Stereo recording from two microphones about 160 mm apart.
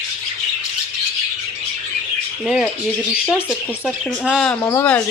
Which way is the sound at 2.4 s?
Centre (ahead or behind).